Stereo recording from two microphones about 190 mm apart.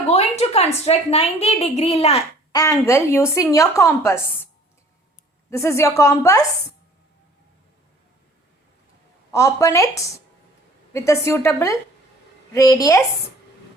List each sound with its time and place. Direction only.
0.1 s a woman's voice: 35° left (ahead or behind)
2.5 s a woman's voice: 20° left (ahead or behind)
5.5 s a woman's voice: 15° left (ahead or behind)
9.3 s a woman's voice: 15° left (ahead or behind)